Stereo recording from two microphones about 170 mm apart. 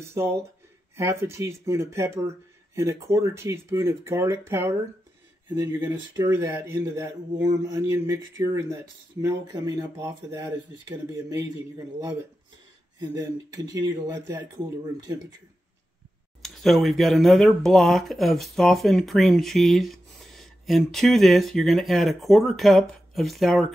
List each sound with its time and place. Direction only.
0.2 s speech: 15° right (ahead or behind)
13.0 s speech: 25° right (ahead or behind)
16.4 s speech: centre (ahead or behind)